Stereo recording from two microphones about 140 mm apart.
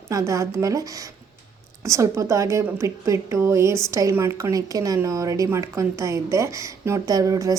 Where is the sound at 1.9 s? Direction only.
20° right (ahead or behind).